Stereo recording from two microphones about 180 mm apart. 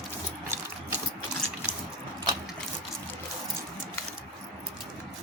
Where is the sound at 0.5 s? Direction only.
15° right (ahead or behind).